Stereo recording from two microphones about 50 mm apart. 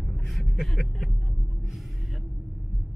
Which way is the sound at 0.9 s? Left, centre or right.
Centre.